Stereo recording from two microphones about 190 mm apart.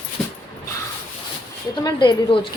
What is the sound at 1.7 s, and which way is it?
Speech, 25° left (ahead or behind).